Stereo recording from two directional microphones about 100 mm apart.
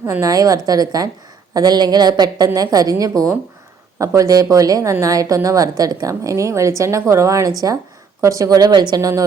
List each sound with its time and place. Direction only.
0.0 s a woman's voice: 25° right (ahead or behind)
0.3 s speech: 35° right (ahead or behind)